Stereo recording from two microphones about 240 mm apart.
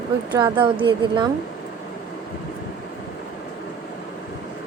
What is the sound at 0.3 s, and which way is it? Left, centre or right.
Speech, centre.